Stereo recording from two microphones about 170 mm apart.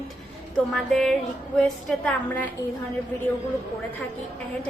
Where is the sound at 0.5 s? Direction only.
5° left (ahead or behind).